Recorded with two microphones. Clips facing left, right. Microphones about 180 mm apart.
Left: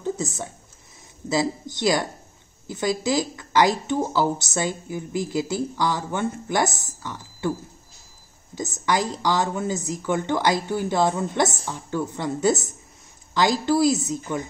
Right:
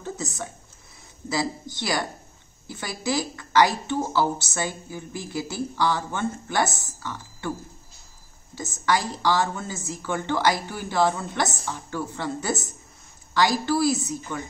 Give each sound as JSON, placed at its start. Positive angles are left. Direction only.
{"t": 0.0, "sound": "a sound", "side_deg": 25}
{"t": 1.3, "sound": "speech", "side_deg": 20}
{"t": 8.5, "sound": "speech", "side_deg": 20}